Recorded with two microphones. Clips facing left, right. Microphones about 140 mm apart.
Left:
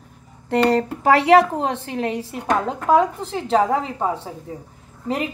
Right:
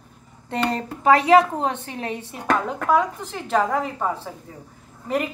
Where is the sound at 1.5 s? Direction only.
30° left (ahead or behind).